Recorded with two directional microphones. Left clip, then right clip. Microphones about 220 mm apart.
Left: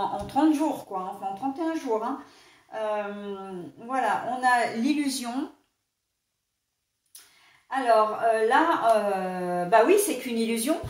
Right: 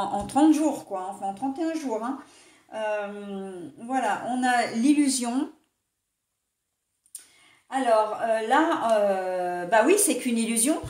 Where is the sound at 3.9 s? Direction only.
45° right (ahead or behind).